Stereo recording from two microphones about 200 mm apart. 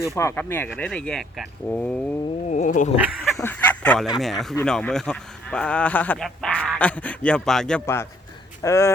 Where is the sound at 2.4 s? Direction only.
40° left (ahead or behind).